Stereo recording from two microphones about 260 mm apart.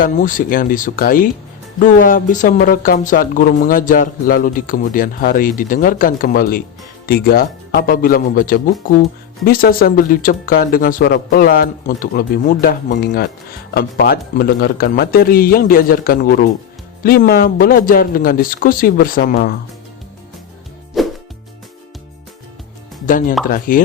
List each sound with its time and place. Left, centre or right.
0.0 s speech: left
20.9 s music: centre
23.0 s speech: left